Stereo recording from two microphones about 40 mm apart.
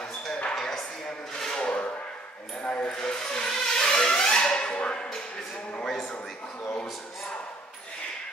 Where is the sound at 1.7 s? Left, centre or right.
Left.